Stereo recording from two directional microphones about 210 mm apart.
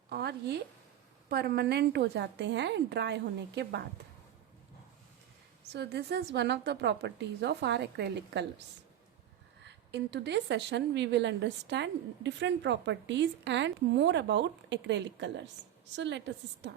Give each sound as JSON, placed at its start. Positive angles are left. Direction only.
{"t": 0.1, "sound": "a sound", "side_deg": -50}
{"t": 1.3, "sound": "a woman's voice", "side_deg": -50}
{"t": 5.7, "sound": "a woman's voice", "side_deg": -50}
{"t": 9.6, "sound": "a woman's voice", "side_deg": -55}